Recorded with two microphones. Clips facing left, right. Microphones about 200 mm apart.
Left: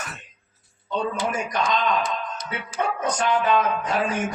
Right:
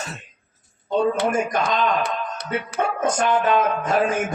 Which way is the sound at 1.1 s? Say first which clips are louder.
Right 5 dB; 65° right (ahead or behind).